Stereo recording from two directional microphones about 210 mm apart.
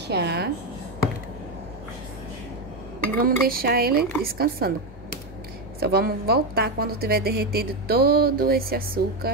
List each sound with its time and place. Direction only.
0.1 s a woman's voice: 50° right (ahead or behind)
3.2 s a woman's voice: 45° right (ahead or behind)
5.8 s a woman's voice: 50° right (ahead or behind)